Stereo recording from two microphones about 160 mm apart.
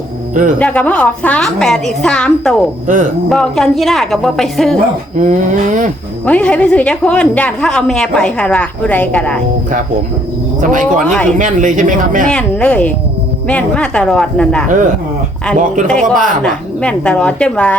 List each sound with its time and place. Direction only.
0.6 s a woman's voice: 10° left (ahead or behind)
2.8 s speech: 55° right (ahead or behind)
3.2 s a woman's voice: centre (ahead or behind)
5.2 s speech: 55° right (ahead or behind)
6.2 s a woman's voice: 10° left (ahead or behind)
10.6 s speech: 55° right (ahead or behind)
12.3 s a woman's voice: 5° left (ahead or behind)
15.9 s a woman's voice: centre (ahead or behind)
16.1 s speech: 55° right (ahead or behind)
16.4 s a woman's voice: 5° left (ahead or behind)